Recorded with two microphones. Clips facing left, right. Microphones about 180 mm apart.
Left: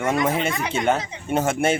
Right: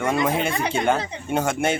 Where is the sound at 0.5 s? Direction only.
30° right (ahead or behind).